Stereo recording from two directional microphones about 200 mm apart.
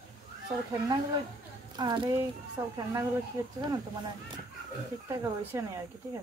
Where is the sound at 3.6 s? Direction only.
20° right (ahead or behind).